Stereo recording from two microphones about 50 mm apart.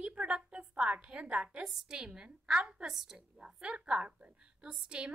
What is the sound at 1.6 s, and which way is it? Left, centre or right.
A woman's voice, centre.